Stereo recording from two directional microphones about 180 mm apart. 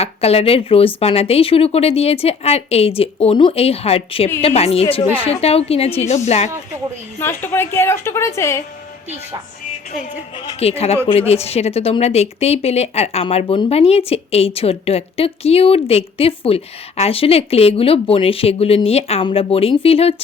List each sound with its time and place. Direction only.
0.0 s speech: 35° left (ahead or behind)
7.2 s speech: 10° left (ahead or behind)
10.4 s speech: 35° left (ahead or behind)